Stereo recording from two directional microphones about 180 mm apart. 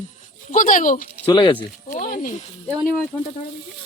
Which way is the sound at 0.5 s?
45° left (ahead or behind).